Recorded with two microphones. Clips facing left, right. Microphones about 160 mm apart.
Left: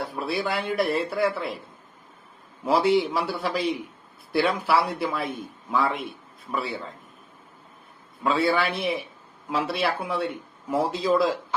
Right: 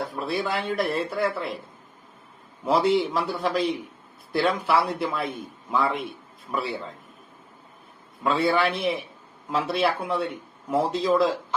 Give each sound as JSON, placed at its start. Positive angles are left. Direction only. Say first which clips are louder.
{"t": 0.0, "sound": "speech", "louder": "even", "side_deg": 5}
{"t": 2.6, "sound": "a man's voice", "louder": "even", "side_deg": 5}
{"t": 8.2, "sound": "speech", "louder": "right 1 dB", "side_deg": 0}